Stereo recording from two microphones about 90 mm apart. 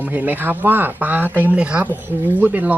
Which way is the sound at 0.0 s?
20° right (ahead or behind).